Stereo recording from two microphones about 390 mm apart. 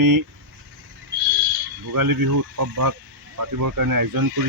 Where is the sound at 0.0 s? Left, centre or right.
Right.